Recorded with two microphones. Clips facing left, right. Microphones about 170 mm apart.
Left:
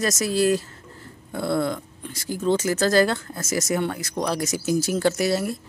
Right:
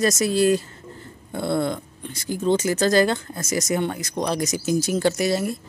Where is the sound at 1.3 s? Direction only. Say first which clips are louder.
Right 1 dB; 25° right (ahead or behind).